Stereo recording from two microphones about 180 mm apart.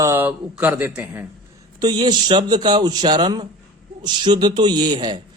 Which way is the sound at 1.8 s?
25° right (ahead or behind).